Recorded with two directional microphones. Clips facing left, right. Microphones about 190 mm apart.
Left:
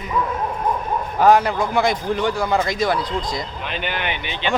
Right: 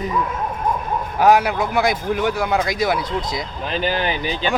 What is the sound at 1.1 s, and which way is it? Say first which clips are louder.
Speech: even; 5° right (ahead or behind).